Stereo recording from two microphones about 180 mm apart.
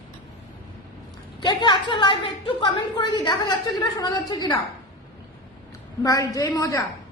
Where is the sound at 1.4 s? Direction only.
25° left (ahead or behind).